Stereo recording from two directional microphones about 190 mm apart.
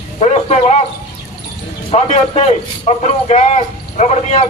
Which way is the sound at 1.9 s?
35° left (ahead or behind).